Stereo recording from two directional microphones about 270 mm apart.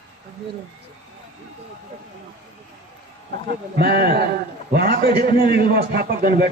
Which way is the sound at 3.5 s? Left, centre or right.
Right.